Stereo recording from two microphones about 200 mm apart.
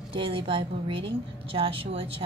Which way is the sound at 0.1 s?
25° right (ahead or behind).